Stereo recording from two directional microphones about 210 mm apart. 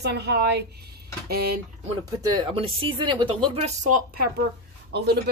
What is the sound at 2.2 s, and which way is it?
Speech, 25° right (ahead or behind).